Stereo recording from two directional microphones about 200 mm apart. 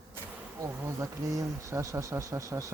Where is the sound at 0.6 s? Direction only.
15° right (ahead or behind).